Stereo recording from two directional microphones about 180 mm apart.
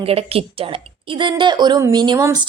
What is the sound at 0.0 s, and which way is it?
A woman's voice, 30° right (ahead or behind).